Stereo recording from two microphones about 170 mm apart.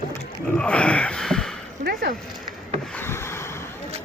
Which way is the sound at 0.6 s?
5° left (ahead or behind).